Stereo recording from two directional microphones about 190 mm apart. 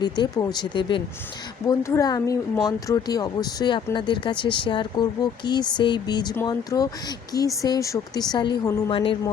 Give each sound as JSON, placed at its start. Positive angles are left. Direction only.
{"t": 0.0, "sound": "speech", "side_deg": 20}